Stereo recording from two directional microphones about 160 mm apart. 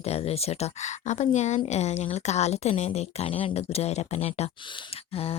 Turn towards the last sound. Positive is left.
turn(degrees=40)  # may be behind; listen again after turning